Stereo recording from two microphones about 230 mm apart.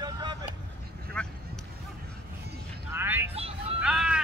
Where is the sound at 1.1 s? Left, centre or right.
Centre.